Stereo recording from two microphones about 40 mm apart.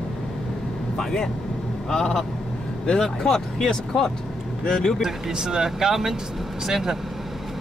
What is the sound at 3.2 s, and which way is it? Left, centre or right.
Speech, centre.